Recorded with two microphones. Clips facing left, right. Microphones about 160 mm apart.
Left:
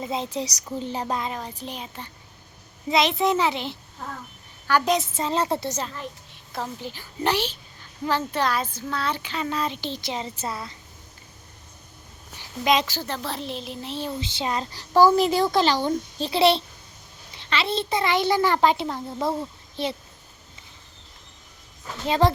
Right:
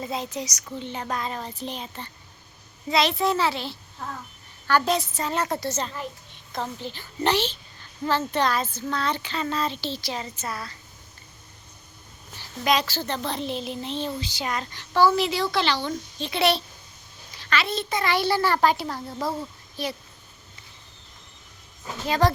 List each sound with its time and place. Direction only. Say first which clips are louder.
0.0 s a woman's voice: left 2 dB; 20° left (ahead or behind)
1.1 s speech: left 1 dB; 15° left (ahead or behind)
2.9 s a child's voice: left 1 dB; 20° left (ahead or behind)
5.6 s a child's voice: right 1 dB; 10° left (ahead or behind)
12.4 s a woman's voice: left 2 dB; 20° left (ahead or behind)
13.1 s speech: right 2 dB; 5° left (ahead or behind)
14.2 s a woman's voice: left 2 dB; 25° left (ahead or behind)
22.0 s a child's voice: left 1 dB; 25° left (ahead or behind)